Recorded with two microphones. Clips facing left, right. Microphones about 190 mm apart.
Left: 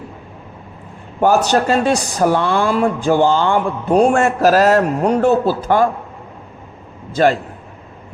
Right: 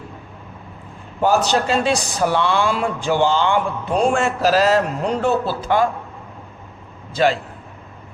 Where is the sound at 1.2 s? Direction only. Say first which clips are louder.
Left 3 dB; 45° left (ahead or behind).